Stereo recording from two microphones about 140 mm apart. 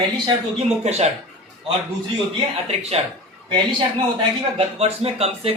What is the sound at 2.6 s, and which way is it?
Speech, 50° right (ahead or behind).